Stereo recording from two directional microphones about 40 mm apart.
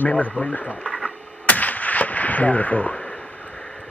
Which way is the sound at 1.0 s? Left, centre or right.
Left.